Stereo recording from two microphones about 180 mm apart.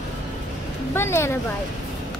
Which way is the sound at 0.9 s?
15° left (ahead or behind).